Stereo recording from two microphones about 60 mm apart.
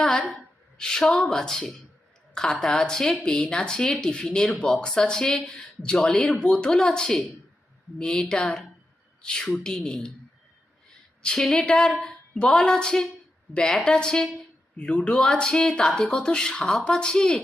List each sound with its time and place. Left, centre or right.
0.0 s a sound: centre
0.8 s speech: centre
11.2 s a woman's voice: centre